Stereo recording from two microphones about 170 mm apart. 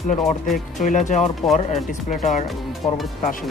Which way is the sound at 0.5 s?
50° left (ahead or behind).